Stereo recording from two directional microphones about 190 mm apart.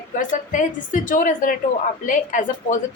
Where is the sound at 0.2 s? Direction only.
45° left (ahead or behind).